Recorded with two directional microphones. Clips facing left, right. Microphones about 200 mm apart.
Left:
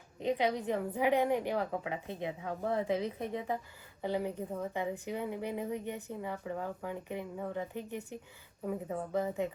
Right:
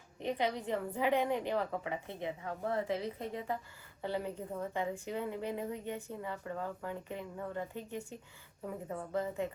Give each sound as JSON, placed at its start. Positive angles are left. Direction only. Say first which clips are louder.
{"t": 0.2, "sound": "a woman's voice", "louder": "left 3 dB", "side_deg": 15}